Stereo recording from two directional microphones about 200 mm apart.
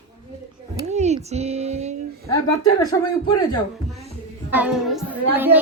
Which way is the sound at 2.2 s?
15° left (ahead or behind).